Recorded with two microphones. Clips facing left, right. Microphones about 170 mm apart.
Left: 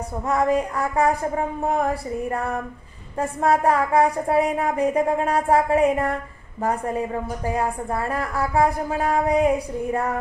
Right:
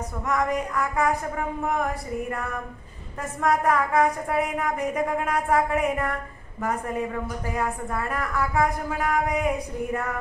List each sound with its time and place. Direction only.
0.3 s a woman's voice: 30° left (ahead or behind)
3.2 s a woman's voice: 30° left (ahead or behind)
7.2 s a woman's voice: 35° left (ahead or behind)